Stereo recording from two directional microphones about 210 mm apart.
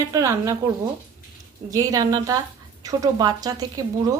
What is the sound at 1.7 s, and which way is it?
Speech, 15° right (ahead or behind).